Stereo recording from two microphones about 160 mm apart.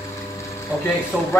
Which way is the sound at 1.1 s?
Centre (ahead or behind).